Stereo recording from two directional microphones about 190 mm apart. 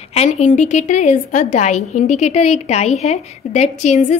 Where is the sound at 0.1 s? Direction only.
35° left (ahead or behind).